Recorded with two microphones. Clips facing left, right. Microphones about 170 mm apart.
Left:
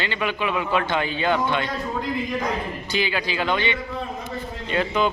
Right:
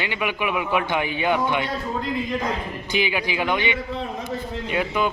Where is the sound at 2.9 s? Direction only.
15° right (ahead or behind).